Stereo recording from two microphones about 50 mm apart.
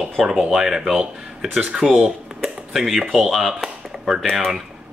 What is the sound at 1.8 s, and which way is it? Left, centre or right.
Speech, centre.